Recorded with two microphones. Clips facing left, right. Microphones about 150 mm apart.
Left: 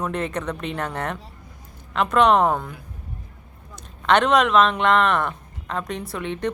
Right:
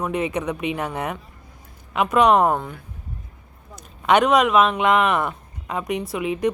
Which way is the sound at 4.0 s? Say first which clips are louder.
Right 1 dB; 10° right (ahead or behind).